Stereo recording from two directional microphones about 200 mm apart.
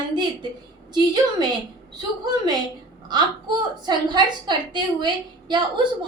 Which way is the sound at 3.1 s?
20° right (ahead or behind).